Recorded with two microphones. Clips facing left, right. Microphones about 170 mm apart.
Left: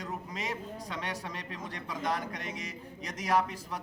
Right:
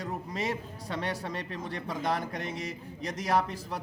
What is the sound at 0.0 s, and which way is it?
A man's voice, 30° right (ahead or behind).